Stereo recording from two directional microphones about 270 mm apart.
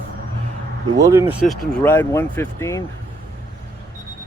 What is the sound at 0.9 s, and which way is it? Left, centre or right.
Speech, centre.